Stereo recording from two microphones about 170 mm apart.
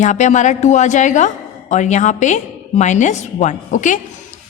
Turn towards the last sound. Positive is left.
turn(degrees=45)  # may be behind; listen again after turning